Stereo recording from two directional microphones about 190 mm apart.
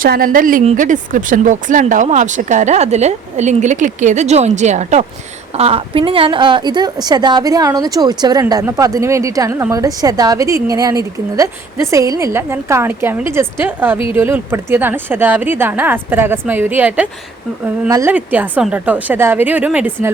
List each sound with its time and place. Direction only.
0.0 s a woman's voice: 50° right (ahead or behind); by 20.1 s 10° right (ahead or behind)